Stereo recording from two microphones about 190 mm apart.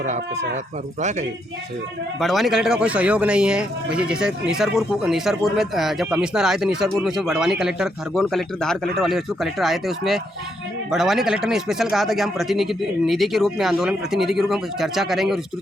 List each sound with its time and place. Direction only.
0.0 s speech: 40° right (ahead or behind)
2.2 s speech: centre (ahead or behind)